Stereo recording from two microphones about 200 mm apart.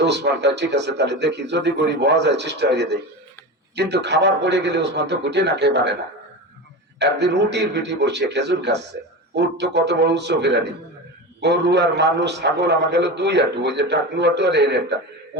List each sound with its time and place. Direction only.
0.0 s a man's voice: 60° right (ahead or behind)
7.0 s a man's voice: 60° right (ahead or behind)